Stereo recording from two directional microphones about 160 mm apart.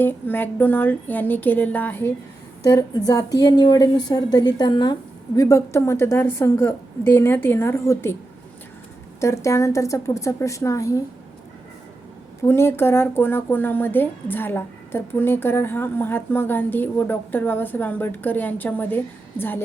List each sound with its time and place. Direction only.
0.0 s speech: 10° left (ahead or behind)
2.6 s speech: 25° left (ahead or behind)
5.4 s speech: 20° left (ahead or behind)
9.2 s speech: 20° left (ahead or behind)
12.4 s speech: 15° left (ahead or behind)